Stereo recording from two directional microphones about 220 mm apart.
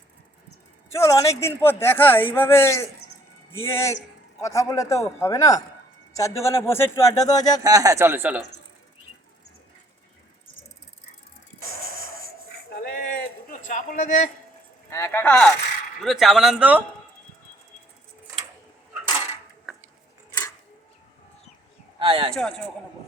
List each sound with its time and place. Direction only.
0.9 s speech: 15° left (ahead or behind)
7.6 s speech: 15° right (ahead or behind)
11.6 s music: 70° left (ahead or behind)
12.8 s a man's voice: 40° left (ahead or behind)
14.8 s speech: 10° left (ahead or behind); by 16.8 s 5° right (ahead or behind)
21.9 s speech: 20° right (ahead or behind)
22.4 s speech: 5° left (ahead or behind)